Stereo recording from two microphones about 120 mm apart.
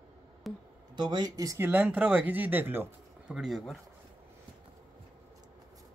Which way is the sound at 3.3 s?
Centre (ahead or behind).